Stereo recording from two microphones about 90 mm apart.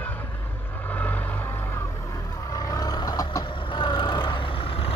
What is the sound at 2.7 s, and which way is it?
Vehicle, 45° left (ahead or behind).